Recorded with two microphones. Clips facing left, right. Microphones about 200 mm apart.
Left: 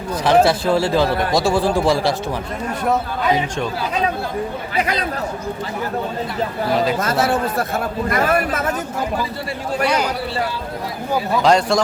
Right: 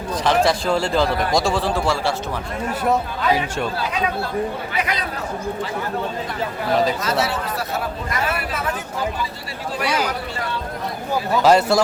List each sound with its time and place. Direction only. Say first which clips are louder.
0.3 s speech: left 4 dB; 5° left (ahead or behind)
7.0 s speech: left 4 dB; 50° left (ahead or behind)
11.4 s speech: right 1 dB; 5° right (ahead or behind)